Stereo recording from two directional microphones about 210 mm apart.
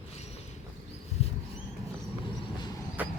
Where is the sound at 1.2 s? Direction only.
30° left (ahead or behind).